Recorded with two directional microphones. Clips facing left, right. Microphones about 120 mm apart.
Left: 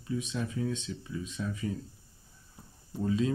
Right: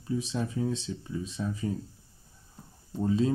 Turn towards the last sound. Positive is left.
turn(degrees=-30)  # may be behind; listen again after turning